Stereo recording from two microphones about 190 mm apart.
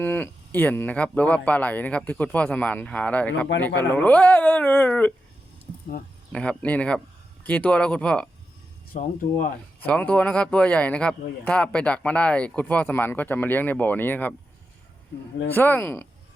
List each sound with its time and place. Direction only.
0.0 s speech: 10° left (ahead or behind)
6.3 s speech: 5° left (ahead or behind)
8.9 s speech: 45° left (ahead or behind)
9.8 s speech: 5° left (ahead or behind)
15.4 s speech: 10° left (ahead or behind)